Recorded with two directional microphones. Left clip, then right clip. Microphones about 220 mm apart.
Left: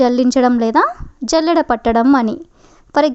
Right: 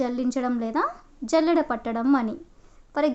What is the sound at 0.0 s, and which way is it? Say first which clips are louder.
A woman's voice: left 14 dB; 40° left (ahead or behind).